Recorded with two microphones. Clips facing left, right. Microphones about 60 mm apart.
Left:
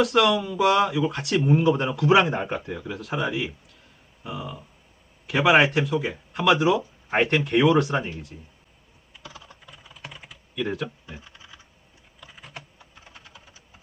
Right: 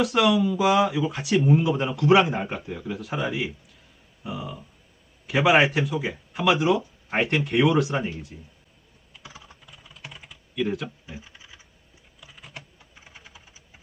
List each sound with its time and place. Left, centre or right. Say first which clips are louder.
0.0 s speech: even; centre
9.2 s computer keyboard: left 2 dB; centre
9.6 s typing: left 2 dB; centre
13.1 s typing: even; centre